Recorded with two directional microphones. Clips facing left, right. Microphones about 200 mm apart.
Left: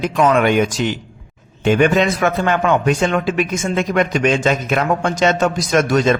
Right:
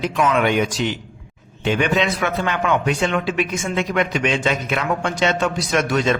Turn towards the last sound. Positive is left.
turn(degrees=45)  # may be behind; listen again after turning